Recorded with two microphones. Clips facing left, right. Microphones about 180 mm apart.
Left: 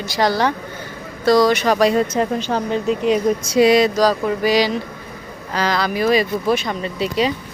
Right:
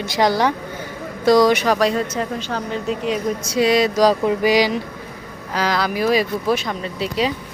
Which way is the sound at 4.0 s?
20° right (ahead or behind).